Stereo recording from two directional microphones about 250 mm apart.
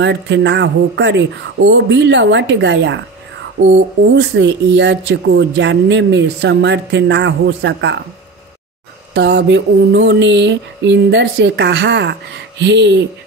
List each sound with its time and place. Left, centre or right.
0.0 s speech: right
9.1 s speech: right